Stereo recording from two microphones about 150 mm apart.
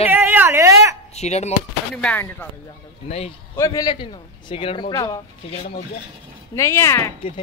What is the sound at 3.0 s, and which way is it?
Speech, 45° left (ahead or behind).